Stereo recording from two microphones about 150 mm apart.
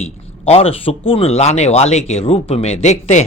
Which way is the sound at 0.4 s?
40° left (ahead or behind).